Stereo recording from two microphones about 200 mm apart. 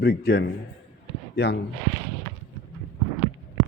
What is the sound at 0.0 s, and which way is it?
Speech, 55° left (ahead or behind).